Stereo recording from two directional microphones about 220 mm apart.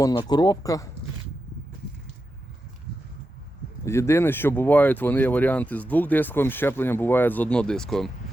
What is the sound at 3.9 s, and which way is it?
Speech, 10° left (ahead or behind).